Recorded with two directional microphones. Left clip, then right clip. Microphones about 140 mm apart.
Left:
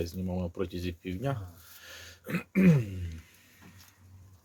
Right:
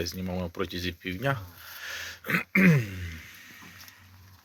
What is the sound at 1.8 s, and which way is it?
Throat clearing, centre (ahead or behind).